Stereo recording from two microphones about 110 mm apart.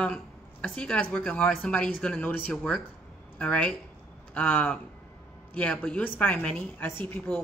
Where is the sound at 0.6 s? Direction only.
10° left (ahead or behind).